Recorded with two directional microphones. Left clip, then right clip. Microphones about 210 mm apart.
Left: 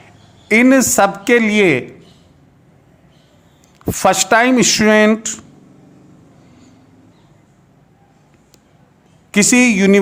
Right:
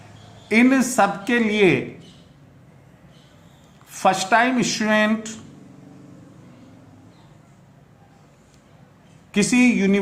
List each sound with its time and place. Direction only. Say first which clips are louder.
0.4 s speech: left 7 dB; 45° left (ahead or behind)
3.9 s speech: left 5 dB; 45° left (ahead or behind)
9.3 s speech: left 6 dB; 45° left (ahead or behind)